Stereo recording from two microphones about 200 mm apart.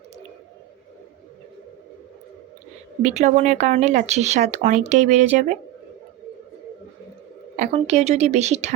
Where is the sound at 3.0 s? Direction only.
35° right (ahead or behind).